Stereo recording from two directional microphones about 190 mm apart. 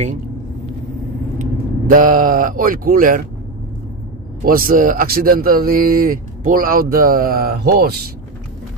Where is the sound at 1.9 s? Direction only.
45° right (ahead or behind).